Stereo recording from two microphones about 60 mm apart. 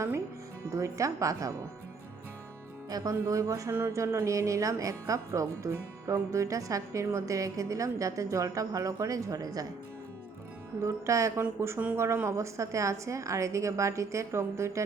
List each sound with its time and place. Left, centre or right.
0.7 s speech: right
3.0 s speech: right
10.8 s speech: right
11.3 s speech: right